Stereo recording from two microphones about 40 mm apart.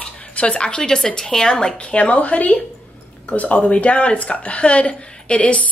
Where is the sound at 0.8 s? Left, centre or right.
Centre.